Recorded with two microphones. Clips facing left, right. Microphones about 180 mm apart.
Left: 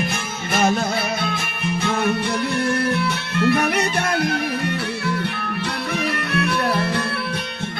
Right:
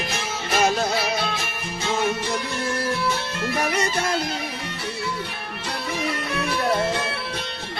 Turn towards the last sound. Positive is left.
turn(degrees=60)  # may be behind; listen again after turning